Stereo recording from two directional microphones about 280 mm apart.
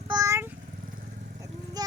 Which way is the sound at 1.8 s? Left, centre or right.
Centre.